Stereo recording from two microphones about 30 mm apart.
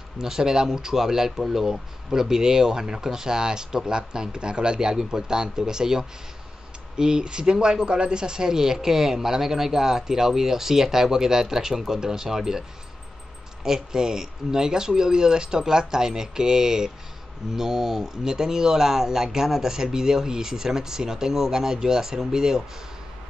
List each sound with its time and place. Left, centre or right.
0.2 s speech: centre
2.1 s speech: centre
13.7 s speech: centre
18.2 s speech: right